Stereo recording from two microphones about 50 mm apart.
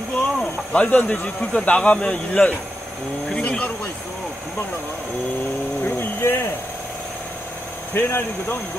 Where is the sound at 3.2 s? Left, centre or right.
Left.